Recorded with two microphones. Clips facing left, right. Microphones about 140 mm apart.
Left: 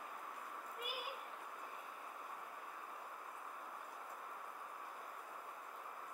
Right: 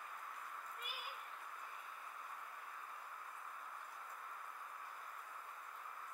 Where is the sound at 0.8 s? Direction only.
10° left (ahead or behind).